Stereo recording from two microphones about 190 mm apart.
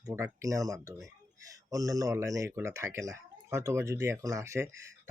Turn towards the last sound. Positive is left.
turn(degrees=-15)  # may be behind; listen again after turning